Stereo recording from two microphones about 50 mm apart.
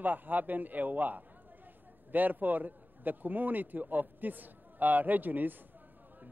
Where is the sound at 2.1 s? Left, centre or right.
Right.